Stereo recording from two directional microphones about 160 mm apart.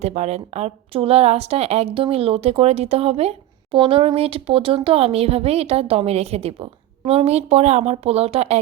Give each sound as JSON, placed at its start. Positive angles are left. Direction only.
{"t": 0.0, "sound": "a woman's voice", "side_deg": -45}